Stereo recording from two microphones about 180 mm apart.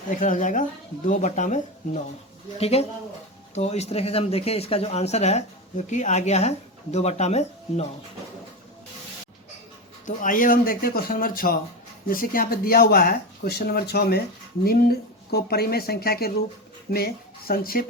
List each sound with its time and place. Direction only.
0.1 s speech: 45° left (ahead or behind)
10.1 s speech: 45° left (ahead or behind)